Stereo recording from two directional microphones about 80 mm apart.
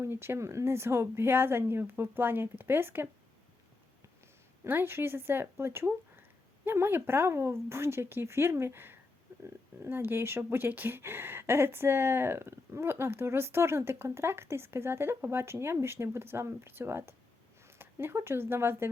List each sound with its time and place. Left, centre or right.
0.0 s speech: right
4.6 s speech: right